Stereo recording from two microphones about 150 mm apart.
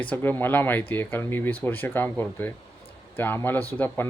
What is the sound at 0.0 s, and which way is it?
Speech, 10° left (ahead or behind).